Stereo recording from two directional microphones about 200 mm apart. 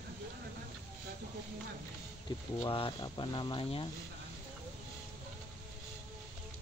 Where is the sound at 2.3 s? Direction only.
25° left (ahead or behind).